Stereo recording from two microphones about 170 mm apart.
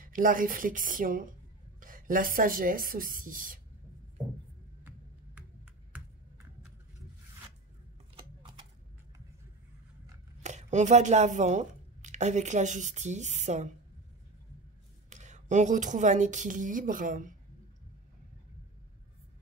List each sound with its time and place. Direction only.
0.0 s a woman's voice: 55° right (ahead or behind)
8.4 s a sound: 30° right (ahead or behind)
10.4 s speech: 45° right (ahead or behind)
15.0 s speech: 45° right (ahead or behind)